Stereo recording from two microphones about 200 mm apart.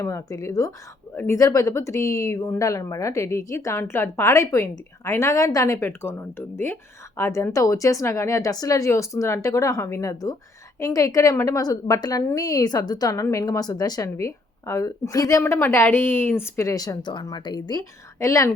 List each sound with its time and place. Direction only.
0.0 s a woman's voice: 15° left (ahead or behind)